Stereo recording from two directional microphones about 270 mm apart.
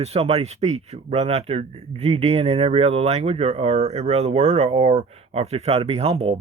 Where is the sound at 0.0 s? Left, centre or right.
Right.